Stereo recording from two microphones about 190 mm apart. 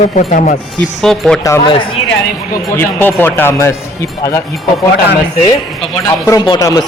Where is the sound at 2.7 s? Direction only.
10° left (ahead or behind).